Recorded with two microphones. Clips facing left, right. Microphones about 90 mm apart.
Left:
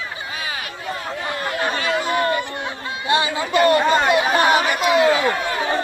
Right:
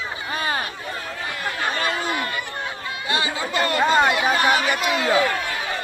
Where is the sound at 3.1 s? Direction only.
25° left (ahead or behind).